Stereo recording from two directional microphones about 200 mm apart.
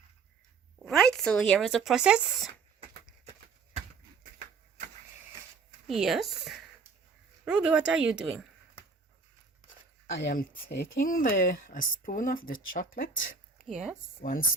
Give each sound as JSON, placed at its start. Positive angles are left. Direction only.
{"t": 0.9, "sound": "speech", "side_deg": 0}
{"t": 5.9, "sound": "speech", "side_deg": 0}
{"t": 10.2, "sound": "speech", "side_deg": 50}